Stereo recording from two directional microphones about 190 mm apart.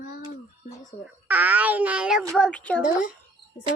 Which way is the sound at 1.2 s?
10° right (ahead or behind).